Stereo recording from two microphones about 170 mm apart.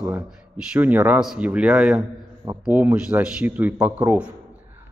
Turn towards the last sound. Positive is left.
turn(degrees=-10)  # may be behind; listen again after turning